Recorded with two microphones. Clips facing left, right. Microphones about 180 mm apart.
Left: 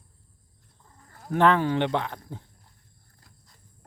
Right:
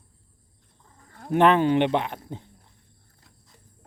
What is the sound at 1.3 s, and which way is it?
Speech, 20° right (ahead or behind).